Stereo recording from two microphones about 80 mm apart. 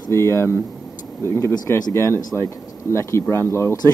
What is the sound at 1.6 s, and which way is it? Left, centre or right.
Speech, left.